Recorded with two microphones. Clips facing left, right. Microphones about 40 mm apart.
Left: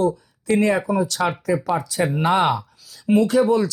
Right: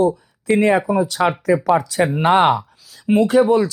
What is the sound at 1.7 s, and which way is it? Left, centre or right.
Speech, right.